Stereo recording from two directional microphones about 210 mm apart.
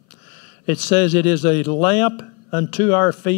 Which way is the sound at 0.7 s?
10° left (ahead or behind).